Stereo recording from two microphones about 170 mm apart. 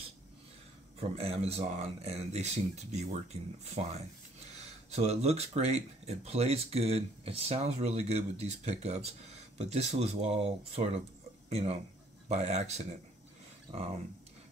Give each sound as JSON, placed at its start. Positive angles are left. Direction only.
{"t": 0.9, "sound": "speech", "side_deg": -35}